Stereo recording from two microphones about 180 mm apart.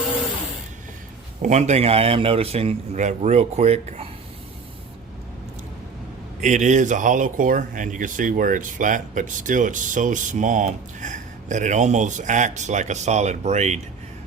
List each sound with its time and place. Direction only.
1.4 s a man's voice: 40° right (ahead or behind)
6.4 s speech: 40° right (ahead or behind)